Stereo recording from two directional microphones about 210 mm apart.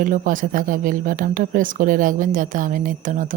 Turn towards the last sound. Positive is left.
turn(degrees=-40)  # may be behind; listen again after turning